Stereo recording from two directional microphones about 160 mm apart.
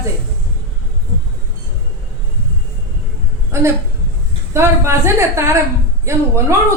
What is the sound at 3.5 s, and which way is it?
A woman's voice, 20° right (ahead or behind).